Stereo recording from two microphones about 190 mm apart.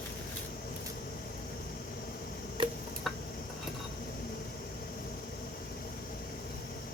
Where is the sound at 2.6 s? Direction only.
25° right (ahead or behind).